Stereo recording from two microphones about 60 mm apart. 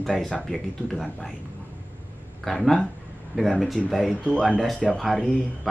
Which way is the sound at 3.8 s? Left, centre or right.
Centre.